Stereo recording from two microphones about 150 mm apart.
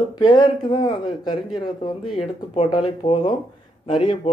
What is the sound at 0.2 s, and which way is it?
Speech, 30° left (ahead or behind).